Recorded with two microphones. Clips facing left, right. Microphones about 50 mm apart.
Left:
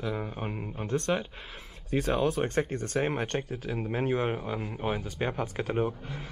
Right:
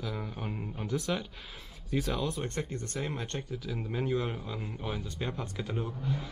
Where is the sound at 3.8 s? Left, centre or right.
Left.